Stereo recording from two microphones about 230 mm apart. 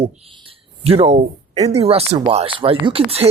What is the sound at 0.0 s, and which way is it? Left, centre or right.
Speech, right.